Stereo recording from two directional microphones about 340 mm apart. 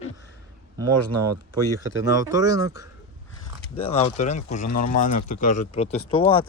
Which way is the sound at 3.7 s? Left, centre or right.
Centre.